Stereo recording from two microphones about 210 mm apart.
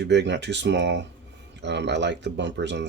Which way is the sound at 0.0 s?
55° right (ahead or behind).